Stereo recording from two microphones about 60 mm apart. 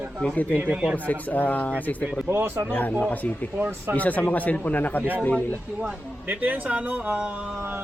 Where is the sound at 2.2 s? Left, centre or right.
Right.